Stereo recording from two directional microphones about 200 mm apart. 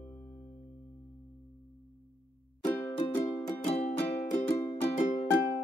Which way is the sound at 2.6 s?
10° left (ahead or behind).